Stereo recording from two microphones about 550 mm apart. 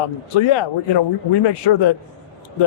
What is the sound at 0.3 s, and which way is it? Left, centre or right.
A man's voice, left.